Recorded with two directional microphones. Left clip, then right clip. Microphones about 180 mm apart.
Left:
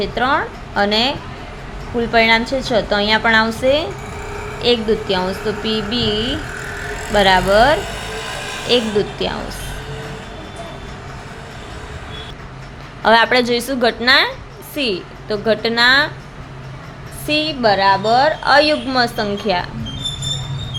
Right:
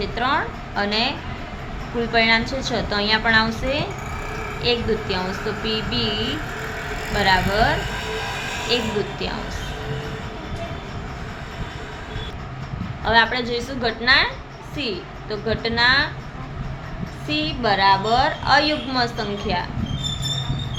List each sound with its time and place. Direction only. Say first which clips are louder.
0.0 s a woman's voice: left 5 dB; 45° left (ahead or behind)
13.1 s a woman's voice: left 6 dB; 60° left (ahead or behind)
17.2 s a woman's voice: left 6 dB; 50° left (ahead or behind)